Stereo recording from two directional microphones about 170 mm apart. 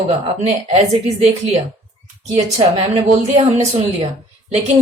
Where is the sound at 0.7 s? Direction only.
40° right (ahead or behind).